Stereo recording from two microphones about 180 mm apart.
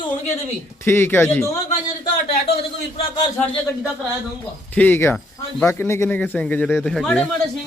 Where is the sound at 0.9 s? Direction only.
15° left (ahead or behind).